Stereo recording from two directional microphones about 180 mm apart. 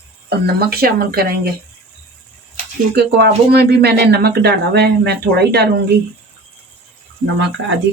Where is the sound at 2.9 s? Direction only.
65° right (ahead or behind).